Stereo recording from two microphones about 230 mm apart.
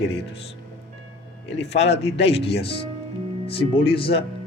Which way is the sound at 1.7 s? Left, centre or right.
Left.